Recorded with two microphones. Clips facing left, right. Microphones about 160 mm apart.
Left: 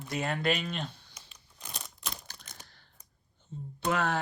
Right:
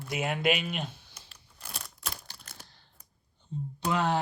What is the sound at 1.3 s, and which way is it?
Crumpling, 5° right (ahead or behind).